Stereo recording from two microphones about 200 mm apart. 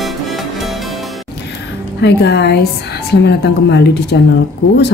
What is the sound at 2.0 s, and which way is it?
Speech, 60° left (ahead or behind).